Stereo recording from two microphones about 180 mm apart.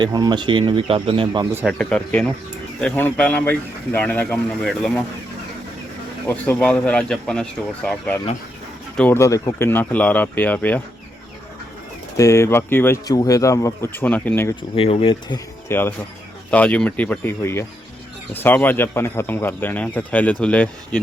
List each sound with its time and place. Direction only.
0.0 s speech: 25° right (ahead or behind)
1.6 s speech: 5° left (ahead or behind)
6.2 s speech: 10° left (ahead or behind)
12.1 s speech: 15° left (ahead or behind)
14.5 s speech: 30° left (ahead or behind)
15.7 s speech: 10° left (ahead or behind)